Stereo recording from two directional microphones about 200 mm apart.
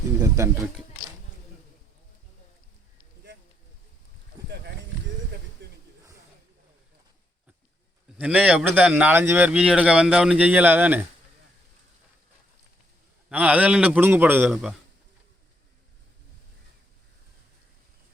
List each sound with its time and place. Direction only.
0.2 s speech: 15° right (ahead or behind)
5.6 s a sound: 60° right (ahead or behind)
8.2 s speech: 5° right (ahead or behind)
13.3 s speech: 5° right (ahead or behind)